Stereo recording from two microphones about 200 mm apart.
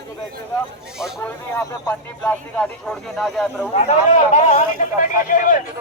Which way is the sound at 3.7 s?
35° left (ahead or behind).